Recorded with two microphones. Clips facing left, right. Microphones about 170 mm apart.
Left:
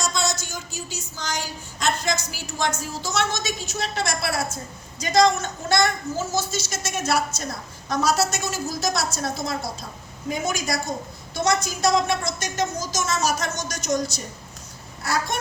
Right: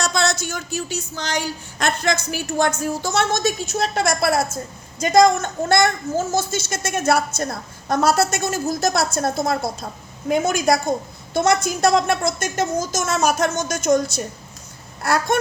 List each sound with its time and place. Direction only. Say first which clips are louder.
0.0 s a woman's voice: right 5 dB; 65° right (ahead or behind)